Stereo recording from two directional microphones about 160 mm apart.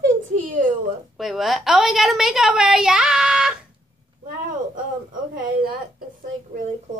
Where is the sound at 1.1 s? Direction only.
Centre (ahead or behind).